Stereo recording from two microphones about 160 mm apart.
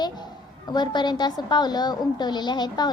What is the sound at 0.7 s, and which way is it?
A woman's voice, 25° left (ahead or behind).